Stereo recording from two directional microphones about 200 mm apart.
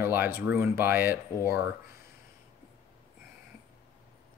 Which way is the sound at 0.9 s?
50° left (ahead or behind).